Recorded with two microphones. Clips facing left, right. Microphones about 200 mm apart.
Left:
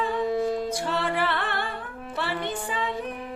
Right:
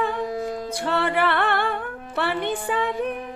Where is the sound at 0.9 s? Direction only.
60° right (ahead or behind).